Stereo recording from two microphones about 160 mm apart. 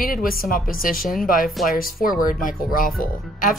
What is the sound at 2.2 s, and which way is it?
Speech, 60° left (ahead or behind).